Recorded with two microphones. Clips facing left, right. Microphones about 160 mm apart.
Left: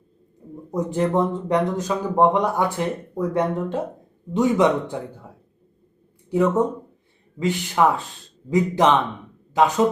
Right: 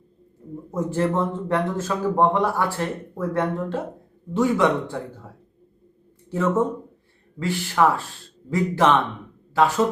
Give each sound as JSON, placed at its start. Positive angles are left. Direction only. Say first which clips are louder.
{"t": 0.7, "sound": "speech", "louder": "left 2 dB", "side_deg": 15}
{"t": 6.3, "sound": "speech", "louder": "left 2 dB", "side_deg": 15}